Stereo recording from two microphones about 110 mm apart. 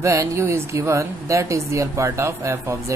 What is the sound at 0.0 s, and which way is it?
Speech, 30° right (ahead or behind).